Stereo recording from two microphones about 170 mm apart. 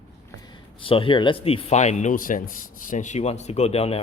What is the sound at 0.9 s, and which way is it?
Speech, 30° left (ahead or behind).